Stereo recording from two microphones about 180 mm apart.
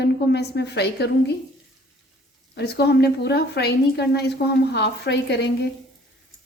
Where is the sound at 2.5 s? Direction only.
65° left (ahead or behind).